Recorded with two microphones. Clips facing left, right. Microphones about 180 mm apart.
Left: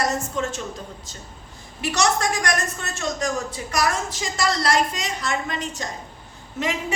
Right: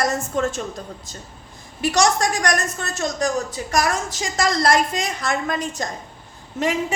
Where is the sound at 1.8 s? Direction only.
40° right (ahead or behind).